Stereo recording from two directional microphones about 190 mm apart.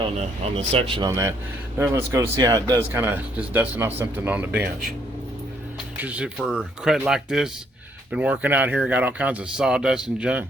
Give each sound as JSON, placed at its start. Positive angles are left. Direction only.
{"t": 0.5, "sound": "speech", "side_deg": -30}
{"t": 6.0, "sound": "speech", "side_deg": -5}